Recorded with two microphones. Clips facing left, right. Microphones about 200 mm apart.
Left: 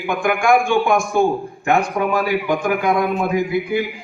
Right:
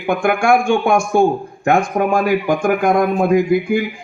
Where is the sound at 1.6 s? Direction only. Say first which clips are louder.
Right 3 dB; 45° right (ahead or behind).